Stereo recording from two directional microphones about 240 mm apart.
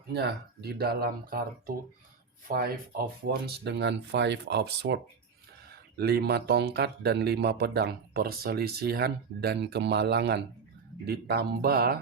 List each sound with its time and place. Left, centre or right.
0.1 s speech: right
6.0 s speech: right